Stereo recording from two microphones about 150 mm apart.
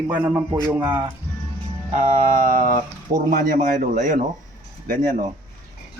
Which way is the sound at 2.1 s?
55° right (ahead or behind).